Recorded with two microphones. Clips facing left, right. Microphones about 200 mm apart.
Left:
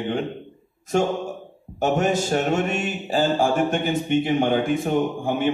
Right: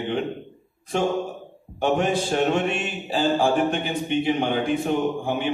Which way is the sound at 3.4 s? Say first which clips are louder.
Even; 45° left (ahead or behind).